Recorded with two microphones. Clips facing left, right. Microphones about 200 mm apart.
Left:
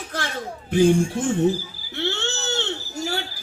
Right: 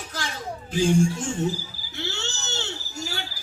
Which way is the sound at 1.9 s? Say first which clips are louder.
Left 7 dB; 55° left (ahead or behind).